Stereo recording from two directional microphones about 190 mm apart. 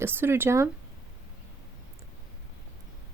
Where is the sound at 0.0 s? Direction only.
10° right (ahead or behind).